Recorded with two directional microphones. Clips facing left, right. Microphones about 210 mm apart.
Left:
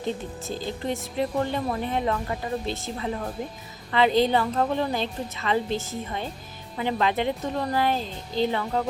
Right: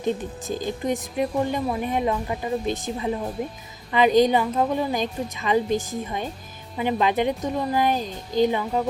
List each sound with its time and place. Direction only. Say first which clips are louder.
0.0 s a woman's voice: right 4 dB; 15° right (ahead or behind)